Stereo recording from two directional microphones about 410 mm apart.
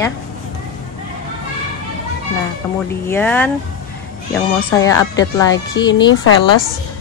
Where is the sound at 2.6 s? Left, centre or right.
Centre.